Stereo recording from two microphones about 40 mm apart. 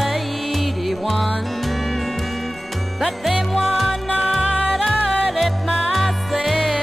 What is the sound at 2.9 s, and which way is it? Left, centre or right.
Music, centre.